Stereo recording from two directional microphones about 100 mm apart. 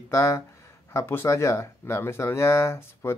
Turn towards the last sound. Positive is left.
turn(degrees=25)  # may be behind; listen again after turning